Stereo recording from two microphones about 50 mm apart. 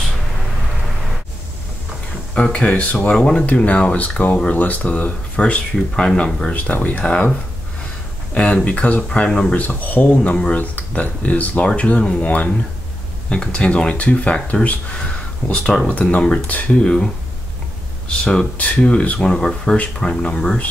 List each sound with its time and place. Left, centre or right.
2.3 s speech: left
3.1 s speech: centre
5.4 s speech: centre
8.4 s speech: left
9.6 s speech: left
10.0 s speech: left
16.7 s speech: centre